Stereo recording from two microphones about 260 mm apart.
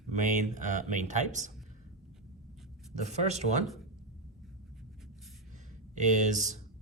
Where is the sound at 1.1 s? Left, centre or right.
Right.